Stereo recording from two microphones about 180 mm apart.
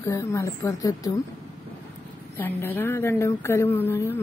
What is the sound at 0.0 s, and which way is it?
A woman's voice, 15° left (ahead or behind).